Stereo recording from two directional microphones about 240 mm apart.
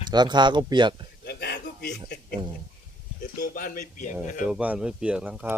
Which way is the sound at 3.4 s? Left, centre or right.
Left.